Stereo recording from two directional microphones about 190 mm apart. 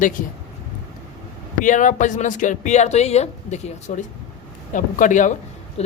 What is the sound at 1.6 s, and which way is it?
A woman's voice, 40° left (ahead or behind).